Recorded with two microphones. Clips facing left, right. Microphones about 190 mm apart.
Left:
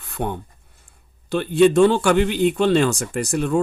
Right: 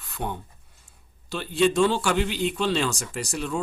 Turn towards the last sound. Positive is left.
turn(degrees=55)  # may be behind; listen again after turning